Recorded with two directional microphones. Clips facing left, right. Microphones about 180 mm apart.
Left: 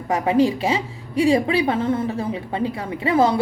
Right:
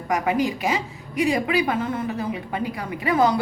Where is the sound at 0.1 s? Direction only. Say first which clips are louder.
Left 4 dB; 30° left (ahead or behind).